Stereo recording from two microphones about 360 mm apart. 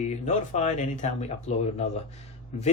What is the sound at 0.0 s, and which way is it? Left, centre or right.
Speech, centre.